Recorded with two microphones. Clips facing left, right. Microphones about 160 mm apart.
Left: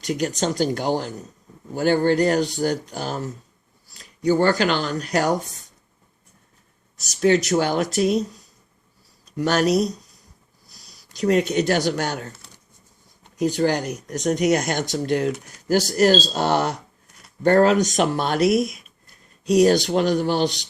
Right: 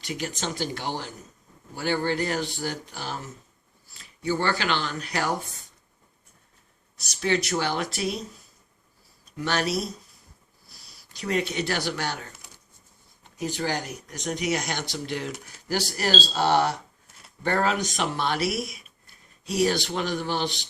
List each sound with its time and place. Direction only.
0.0 s speech: 40° left (ahead or behind)
6.9 s speech: 45° left (ahead or behind)
9.4 s speech: 45° left (ahead or behind)
13.5 s speech: 45° left (ahead or behind)